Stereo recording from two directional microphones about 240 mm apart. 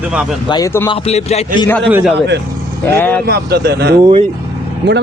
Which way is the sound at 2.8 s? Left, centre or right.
Centre.